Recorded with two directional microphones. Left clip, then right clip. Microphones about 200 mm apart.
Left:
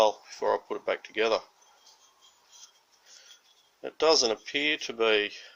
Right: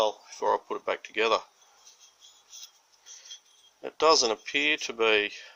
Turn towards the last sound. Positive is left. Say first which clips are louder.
# right 1 dB
turn(degrees=-20)  # may be behind; listen again after turning